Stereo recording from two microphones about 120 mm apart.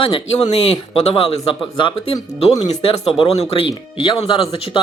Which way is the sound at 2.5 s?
30° left (ahead or behind).